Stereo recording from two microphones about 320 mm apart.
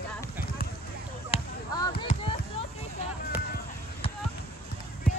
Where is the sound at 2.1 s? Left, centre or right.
Centre.